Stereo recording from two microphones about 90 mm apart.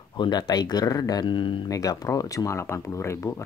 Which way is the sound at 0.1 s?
50° left (ahead or behind).